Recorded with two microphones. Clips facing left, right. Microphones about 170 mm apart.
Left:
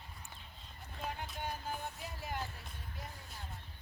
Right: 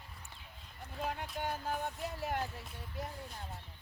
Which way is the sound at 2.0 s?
65° right (ahead or behind).